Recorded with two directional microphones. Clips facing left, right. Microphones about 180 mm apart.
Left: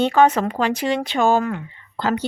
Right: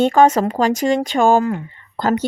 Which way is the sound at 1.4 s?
35° right (ahead or behind).